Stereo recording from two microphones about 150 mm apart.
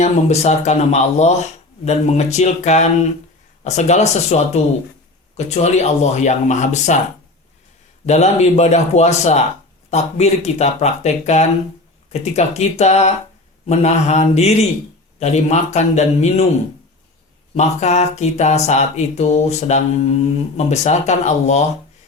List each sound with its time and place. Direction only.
0.0 s speech: 45° left (ahead or behind)
8.0 s speech: 45° left (ahead or behind)
17.5 s speech: 50° left (ahead or behind)